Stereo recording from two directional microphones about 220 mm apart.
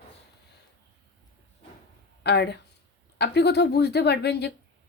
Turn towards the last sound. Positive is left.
turn(degrees=50)  # may be behind; listen again after turning